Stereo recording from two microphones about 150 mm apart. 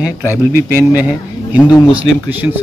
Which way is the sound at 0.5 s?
10° right (ahead or behind).